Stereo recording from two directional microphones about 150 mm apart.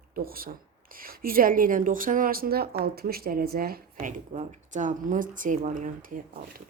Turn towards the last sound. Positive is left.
turn(degrees=-65)  # may be behind; listen again after turning